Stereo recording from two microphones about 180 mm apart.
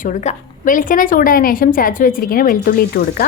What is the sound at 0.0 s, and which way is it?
A woman's voice, 40° left (ahead or behind).